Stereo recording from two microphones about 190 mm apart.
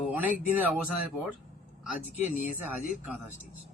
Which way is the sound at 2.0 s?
40° left (ahead or behind).